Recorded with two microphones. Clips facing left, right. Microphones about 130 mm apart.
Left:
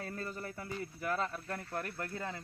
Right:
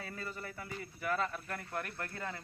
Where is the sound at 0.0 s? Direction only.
40° left (ahead or behind).